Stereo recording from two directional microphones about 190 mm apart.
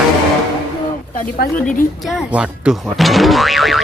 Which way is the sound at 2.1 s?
5° right (ahead or behind).